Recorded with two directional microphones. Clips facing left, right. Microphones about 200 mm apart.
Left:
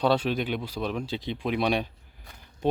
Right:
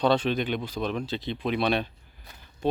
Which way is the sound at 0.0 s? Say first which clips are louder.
Right 1 dB; 10° left (ahead or behind).